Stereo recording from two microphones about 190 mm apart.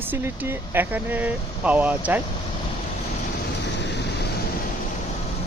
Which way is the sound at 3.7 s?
65° left (ahead or behind).